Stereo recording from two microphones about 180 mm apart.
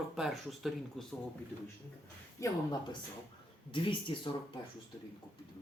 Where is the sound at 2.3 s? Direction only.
15° left (ahead or behind).